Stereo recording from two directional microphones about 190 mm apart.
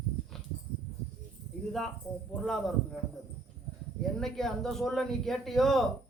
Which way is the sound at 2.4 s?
Centre (ahead or behind).